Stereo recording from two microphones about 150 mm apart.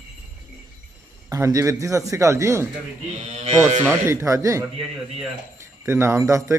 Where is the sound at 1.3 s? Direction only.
20° right (ahead or behind).